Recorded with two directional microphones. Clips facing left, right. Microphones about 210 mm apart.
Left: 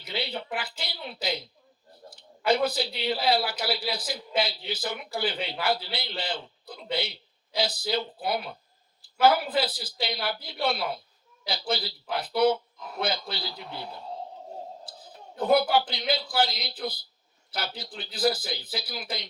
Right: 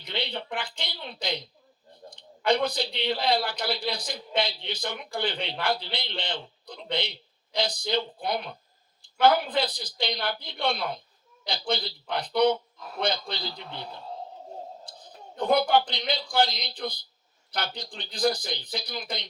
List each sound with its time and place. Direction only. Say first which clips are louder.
0.0 s speech: even; 5° left (ahead or behind)
14.8 s a man's voice: even; 5° left (ahead or behind)